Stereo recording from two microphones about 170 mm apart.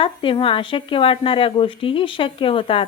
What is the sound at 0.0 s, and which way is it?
A woman's voice, 30° left (ahead or behind).